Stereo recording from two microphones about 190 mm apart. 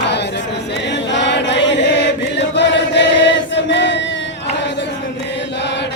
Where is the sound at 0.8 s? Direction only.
70° left (ahead or behind).